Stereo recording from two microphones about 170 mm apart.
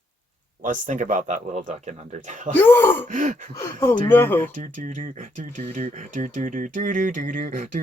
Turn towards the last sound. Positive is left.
turn(degrees=-50)  # may be behind; listen again after turning